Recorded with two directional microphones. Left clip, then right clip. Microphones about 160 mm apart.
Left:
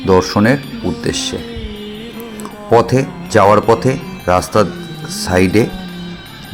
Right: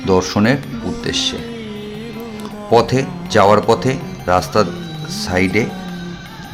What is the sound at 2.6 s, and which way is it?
Speech, 10° left (ahead or behind).